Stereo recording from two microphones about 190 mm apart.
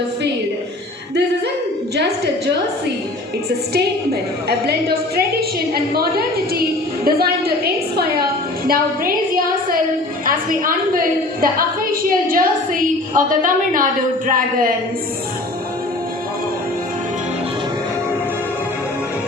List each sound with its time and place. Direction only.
2.0 s a woman's voice: 60° right (ahead or behind)
3.7 s a woman's voice: 55° right (ahead or behind)